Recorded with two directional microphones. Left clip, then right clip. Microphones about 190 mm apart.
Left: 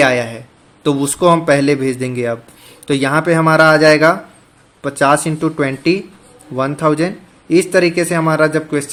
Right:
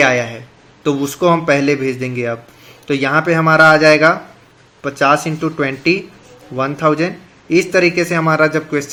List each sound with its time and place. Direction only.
0.0 s a man's voice: 20° left (ahead or behind)